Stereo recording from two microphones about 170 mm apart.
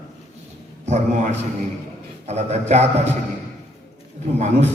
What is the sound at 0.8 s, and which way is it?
A man's voice, 45° right (ahead or behind).